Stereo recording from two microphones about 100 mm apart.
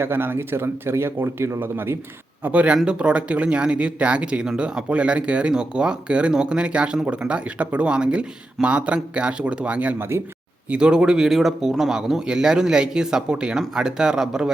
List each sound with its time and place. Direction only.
0.0 s speech: 20° right (ahead or behind)
10.7 s speech: 10° right (ahead or behind)